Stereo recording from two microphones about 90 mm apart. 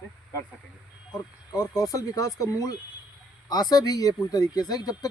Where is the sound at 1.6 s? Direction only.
40° left (ahead or behind).